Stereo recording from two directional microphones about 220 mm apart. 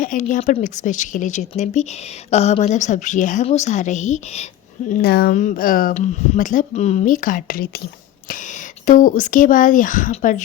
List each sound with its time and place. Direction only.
0.0 s speech: 35° left (ahead or behind)
8.9 s speech: 35° left (ahead or behind)